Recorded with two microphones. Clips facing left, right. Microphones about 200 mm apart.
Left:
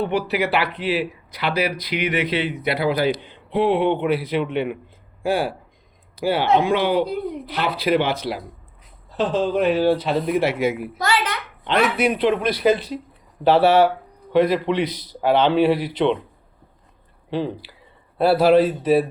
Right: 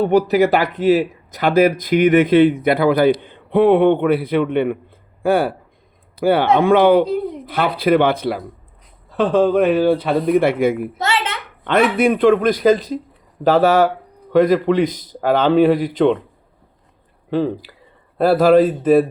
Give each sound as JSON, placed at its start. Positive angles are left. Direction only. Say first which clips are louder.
{"t": 0.0, "sound": "a man's voice", "louder": "right 8 dB", "side_deg": -45}
{"t": 10.9, "sound": "a sound", "louder": "right 1 dB", "side_deg": -25}
{"t": 11.6, "sound": "speech", "louder": "right 5 dB", "side_deg": -50}
{"t": 17.3, "sound": "speech", "louder": "right 6 dB", "side_deg": -45}